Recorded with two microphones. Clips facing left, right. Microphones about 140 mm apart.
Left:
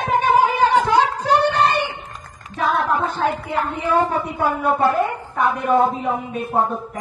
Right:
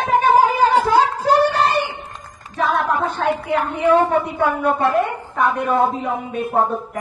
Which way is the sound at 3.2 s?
60° right (ahead or behind).